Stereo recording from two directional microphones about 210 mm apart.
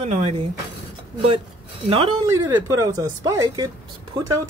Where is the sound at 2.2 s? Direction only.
15° right (ahead or behind).